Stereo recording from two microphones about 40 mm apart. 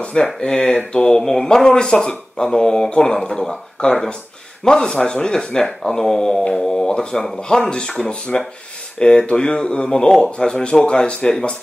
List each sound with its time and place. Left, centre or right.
0.0 s speech: left
8.0 s speech: left